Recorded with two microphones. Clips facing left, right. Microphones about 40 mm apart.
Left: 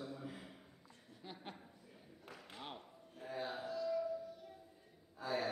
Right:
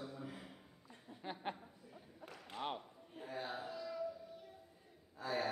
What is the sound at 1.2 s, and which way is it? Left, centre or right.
Speech, right.